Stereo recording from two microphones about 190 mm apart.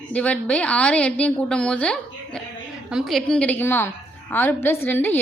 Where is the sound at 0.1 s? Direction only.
5° left (ahead or behind).